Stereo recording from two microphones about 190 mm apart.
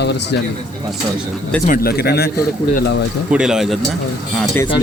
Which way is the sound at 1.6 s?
50° left (ahead or behind).